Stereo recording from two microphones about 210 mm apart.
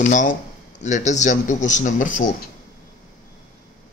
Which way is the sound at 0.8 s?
35° left (ahead or behind).